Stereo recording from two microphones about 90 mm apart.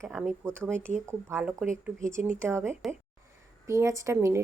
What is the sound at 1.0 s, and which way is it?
Speech, 30° right (ahead or behind).